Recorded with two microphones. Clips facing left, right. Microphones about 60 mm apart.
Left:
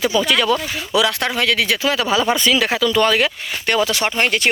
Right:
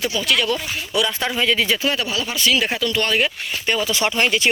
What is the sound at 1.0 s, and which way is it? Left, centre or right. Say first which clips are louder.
Speech: left 1 dB; left.